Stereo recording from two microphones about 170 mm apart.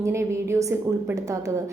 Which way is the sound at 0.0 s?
15° right (ahead or behind).